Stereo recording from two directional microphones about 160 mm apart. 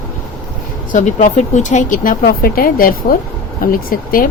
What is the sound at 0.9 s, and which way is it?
Speech, 50° left (ahead or behind).